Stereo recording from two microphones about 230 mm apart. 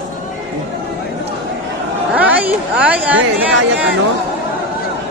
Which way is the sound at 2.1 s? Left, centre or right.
Centre.